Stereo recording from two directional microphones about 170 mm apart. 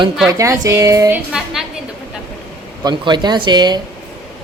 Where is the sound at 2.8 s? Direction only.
25° right (ahead or behind).